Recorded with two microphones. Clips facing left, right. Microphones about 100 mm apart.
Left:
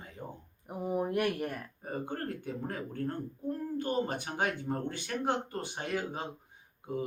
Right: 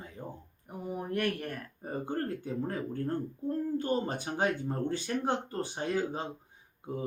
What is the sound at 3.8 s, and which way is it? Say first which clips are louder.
Speech: right 1 dB; 35° right (ahead or behind).